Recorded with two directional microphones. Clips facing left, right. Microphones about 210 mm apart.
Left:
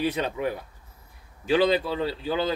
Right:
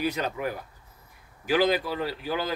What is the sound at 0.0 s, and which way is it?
A man's voice, 30° left (ahead or behind).